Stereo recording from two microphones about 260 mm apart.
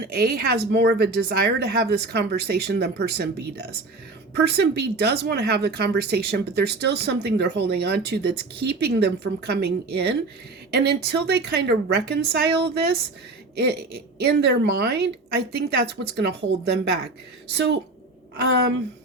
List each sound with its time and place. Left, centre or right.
0.0 s speech: right
4.4 s speech: right